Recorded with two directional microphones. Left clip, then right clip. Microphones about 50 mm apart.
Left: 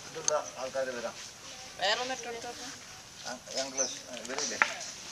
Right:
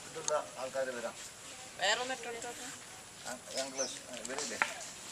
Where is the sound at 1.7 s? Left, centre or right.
Centre.